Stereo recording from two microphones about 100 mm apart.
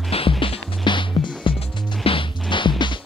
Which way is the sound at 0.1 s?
70° left (ahead or behind).